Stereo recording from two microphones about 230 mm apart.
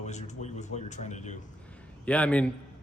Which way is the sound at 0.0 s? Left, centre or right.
Left.